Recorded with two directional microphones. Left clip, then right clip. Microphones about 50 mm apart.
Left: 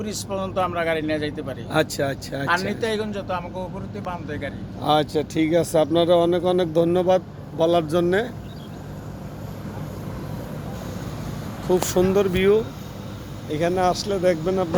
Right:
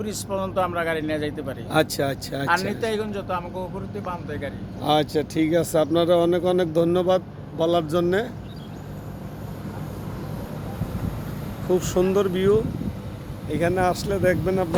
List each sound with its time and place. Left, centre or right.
0.0 s speech: right
2.0 s speech: right
2.6 s speech: right
3.6 s speech: centre
7.6 s speech: left
11.7 s speech: centre
12.3 s speech: left
13.5 s speech: centre